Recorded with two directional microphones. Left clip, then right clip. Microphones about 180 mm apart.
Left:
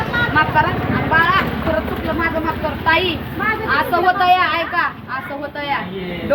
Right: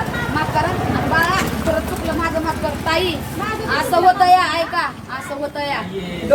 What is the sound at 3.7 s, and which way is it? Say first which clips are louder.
Speech: right 3 dB; 15° right (ahead or behind).